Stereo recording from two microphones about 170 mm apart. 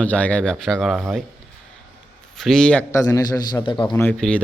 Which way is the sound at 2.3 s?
Centre (ahead or behind).